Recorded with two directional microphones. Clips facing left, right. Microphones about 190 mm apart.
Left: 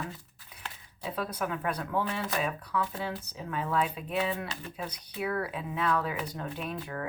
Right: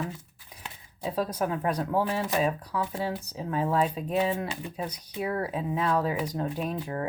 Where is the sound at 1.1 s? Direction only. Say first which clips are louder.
Right 5 dB; 35° right (ahead or behind).